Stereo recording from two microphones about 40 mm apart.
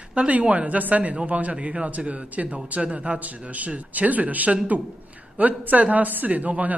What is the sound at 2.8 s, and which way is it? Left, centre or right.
Speech, right.